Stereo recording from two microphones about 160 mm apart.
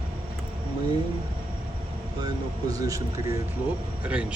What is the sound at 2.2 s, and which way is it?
Speech, 20° right (ahead or behind).